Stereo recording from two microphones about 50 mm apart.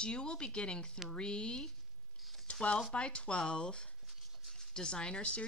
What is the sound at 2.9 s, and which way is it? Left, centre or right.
Speech, left.